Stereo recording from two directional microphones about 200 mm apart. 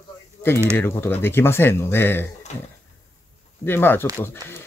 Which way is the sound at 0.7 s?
10° left (ahead or behind).